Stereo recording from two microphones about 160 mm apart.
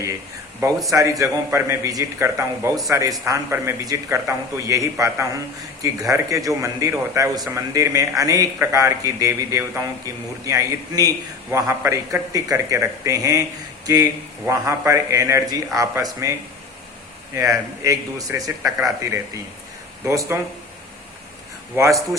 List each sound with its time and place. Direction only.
0.9 s a man's voice: 20° right (ahead or behind)
17.3 s a man's voice: 20° right (ahead or behind)